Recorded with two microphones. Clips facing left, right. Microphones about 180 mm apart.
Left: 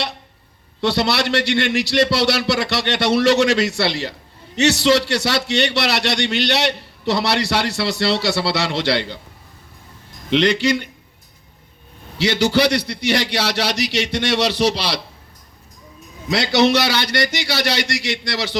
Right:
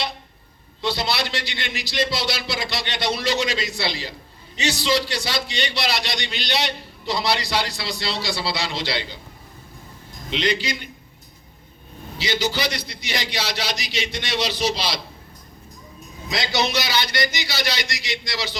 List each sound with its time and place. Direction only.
0.8 s a man's voice: 70° left (ahead or behind)
10.2 s a man's voice: 65° left (ahead or behind)
12.1 s a man's voice: 70° left (ahead or behind)
16.3 s a man's voice: 65° left (ahead or behind)